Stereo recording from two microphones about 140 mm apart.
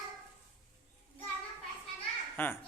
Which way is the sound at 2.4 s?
15° left (ahead or behind).